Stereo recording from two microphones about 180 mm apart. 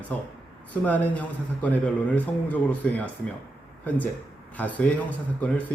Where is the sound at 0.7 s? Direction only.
10° left (ahead or behind).